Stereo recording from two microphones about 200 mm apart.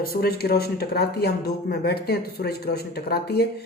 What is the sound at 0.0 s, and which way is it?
Speech, 50° left (ahead or behind).